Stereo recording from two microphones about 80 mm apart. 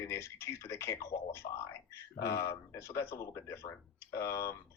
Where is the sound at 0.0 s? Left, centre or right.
Left.